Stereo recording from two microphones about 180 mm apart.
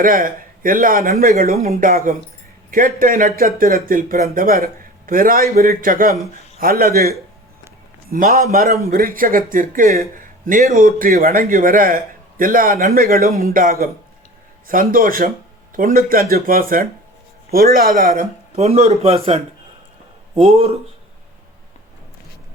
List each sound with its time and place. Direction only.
0.0 s a man's voice: 50° right (ahead or behind)
1.5 s a man's voice: 40° right (ahead or behind)
1.9 s a man's voice: 50° right (ahead or behind)
8.1 s a man's voice: 55° right (ahead or behind); by 20.7 s 30° right (ahead or behind)